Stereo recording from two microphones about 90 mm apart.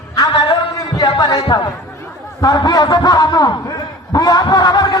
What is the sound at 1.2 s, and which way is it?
A man's voice, 50° left (ahead or behind).